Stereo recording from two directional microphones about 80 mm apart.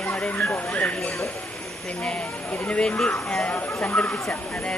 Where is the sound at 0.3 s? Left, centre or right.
Left.